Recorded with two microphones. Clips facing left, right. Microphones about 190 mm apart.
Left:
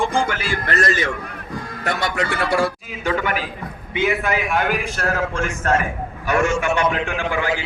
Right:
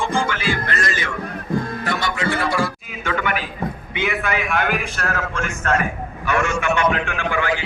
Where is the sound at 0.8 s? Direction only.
40° left (ahead or behind).